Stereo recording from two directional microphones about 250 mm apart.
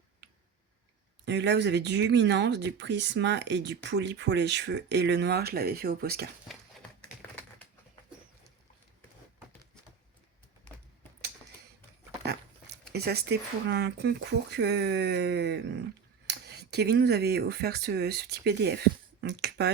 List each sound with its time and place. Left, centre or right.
1.2 s speech: right
12.9 s speech: right